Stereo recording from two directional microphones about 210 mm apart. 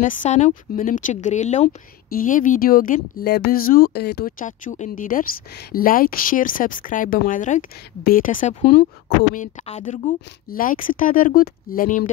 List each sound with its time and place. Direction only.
0.0 s speech: 35° left (ahead or behind)